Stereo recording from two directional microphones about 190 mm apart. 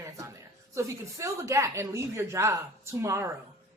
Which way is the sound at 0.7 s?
15° right (ahead or behind).